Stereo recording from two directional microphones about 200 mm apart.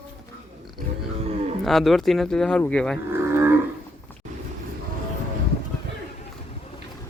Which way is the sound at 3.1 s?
10° right (ahead or behind).